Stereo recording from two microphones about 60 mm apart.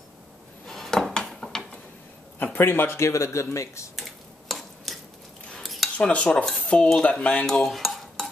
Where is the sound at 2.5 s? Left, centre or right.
Left.